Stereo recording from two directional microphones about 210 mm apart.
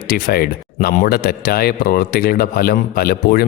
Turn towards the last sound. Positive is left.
turn(degrees=45)  # may be behind; listen again after turning